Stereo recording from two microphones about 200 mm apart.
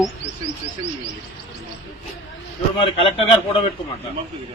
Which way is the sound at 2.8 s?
25° left (ahead or behind).